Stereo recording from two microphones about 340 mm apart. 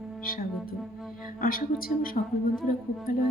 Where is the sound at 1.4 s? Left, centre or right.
Left.